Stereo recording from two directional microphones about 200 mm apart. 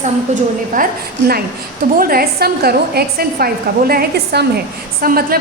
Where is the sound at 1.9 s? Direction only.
45° right (ahead or behind).